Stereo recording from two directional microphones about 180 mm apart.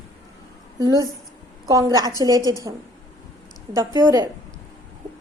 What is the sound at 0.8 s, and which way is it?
A woman's voice, 20° right (ahead or behind).